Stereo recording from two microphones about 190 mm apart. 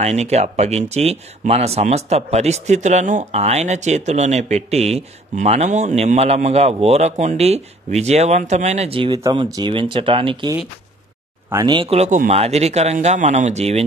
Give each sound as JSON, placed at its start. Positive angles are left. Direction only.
{"t": 0.0, "sound": "speech", "side_deg": -35}
{"t": 11.5, "sound": "speech", "side_deg": -25}